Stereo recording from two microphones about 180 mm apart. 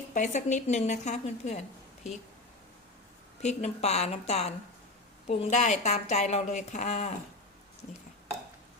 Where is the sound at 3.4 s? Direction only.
40° left (ahead or behind).